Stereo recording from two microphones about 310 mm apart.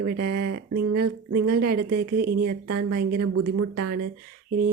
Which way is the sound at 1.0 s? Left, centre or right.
Right.